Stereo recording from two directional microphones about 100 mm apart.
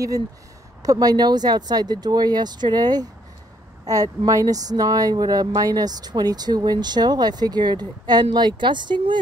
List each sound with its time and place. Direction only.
0.8 s a woman's voice: 40° right (ahead or behind)